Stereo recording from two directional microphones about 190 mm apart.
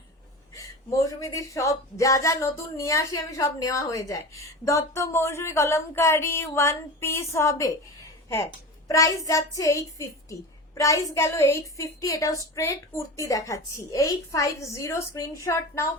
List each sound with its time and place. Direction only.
0.5 s a woman's voice: 15° left (ahead or behind)
8.9 s a woman's voice: 20° left (ahead or behind)